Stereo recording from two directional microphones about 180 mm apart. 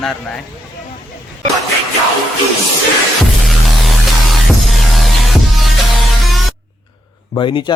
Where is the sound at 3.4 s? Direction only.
Centre (ahead or behind).